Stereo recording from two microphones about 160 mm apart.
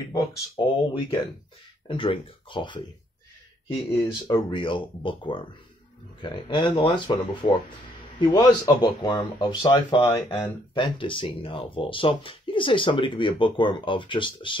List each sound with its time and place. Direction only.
0.1 s speech: 30° left (ahead or behind)
4.0 s speech: 25° left (ahead or behind)